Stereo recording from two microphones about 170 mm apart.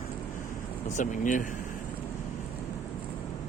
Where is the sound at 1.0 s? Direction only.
50° left (ahead or behind).